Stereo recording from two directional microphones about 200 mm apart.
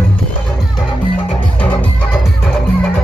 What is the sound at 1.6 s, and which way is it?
Music, 5° left (ahead or behind).